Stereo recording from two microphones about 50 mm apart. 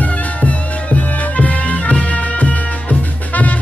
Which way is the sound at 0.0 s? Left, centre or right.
Left.